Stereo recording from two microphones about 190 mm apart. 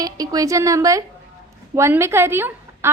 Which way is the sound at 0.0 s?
20° right (ahead or behind).